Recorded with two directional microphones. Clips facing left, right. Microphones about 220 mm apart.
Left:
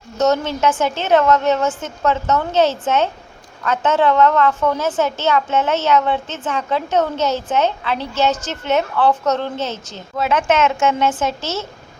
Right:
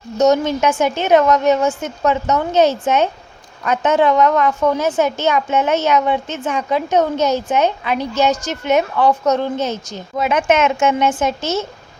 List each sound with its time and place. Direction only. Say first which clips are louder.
0.2 s a woman's voice: right 3 dB; 15° right (ahead or behind)